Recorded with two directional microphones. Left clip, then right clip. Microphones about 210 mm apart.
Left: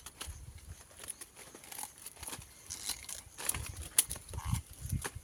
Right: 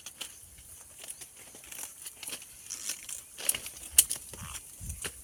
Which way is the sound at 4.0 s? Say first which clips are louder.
Right 7 dB; 5° right (ahead or behind).